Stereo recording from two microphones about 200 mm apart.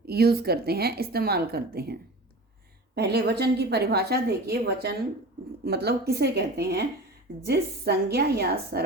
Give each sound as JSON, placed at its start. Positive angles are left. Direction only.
{"t": 0.0, "sound": "a woman's voice", "side_deg": -50}